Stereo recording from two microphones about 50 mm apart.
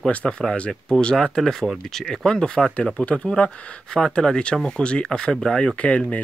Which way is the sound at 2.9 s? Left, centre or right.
Left.